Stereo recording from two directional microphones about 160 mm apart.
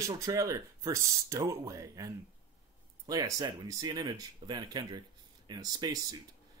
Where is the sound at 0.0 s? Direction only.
20° right (ahead or behind).